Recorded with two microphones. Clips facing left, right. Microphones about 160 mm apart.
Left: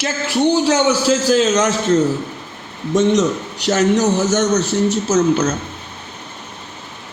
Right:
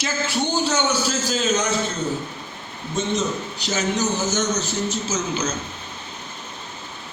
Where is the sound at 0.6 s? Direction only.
75° left (ahead or behind); by 2.0 s 90° left.